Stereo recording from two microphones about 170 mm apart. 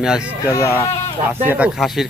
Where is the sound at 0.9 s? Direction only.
35° left (ahead or behind).